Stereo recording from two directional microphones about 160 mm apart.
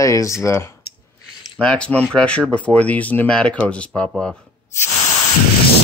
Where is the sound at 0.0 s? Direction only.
20° left (ahead or behind).